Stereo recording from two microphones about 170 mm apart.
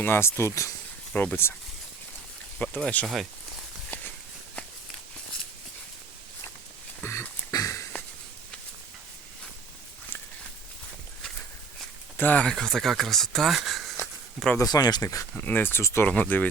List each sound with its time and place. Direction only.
0.0 s speech: 15° left (ahead or behind)
2.6 s speech: 10° left (ahead or behind)
7.0 s a sound: 15° left (ahead or behind)
12.1 s speech: 10° left (ahead or behind)
14.6 s speech: 25° left (ahead or behind)